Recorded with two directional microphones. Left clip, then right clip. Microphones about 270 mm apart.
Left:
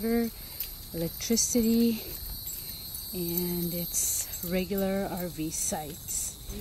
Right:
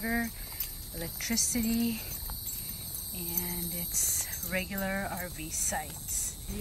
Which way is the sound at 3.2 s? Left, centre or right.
Centre.